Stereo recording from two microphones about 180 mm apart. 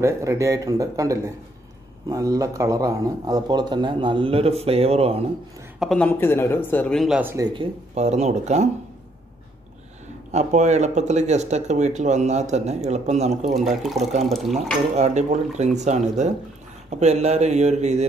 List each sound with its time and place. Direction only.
0.0 s a man's voice: 15° right (ahead or behind); by 5.1 s 35° right (ahead or behind)
5.8 s speech: 5° left (ahead or behind)
7.5 s speech: 40° right (ahead or behind)
10.3 s speech: 40° right (ahead or behind)
14.3 s speech: centre (ahead or behind)
15.0 s speech: 40° right (ahead or behind)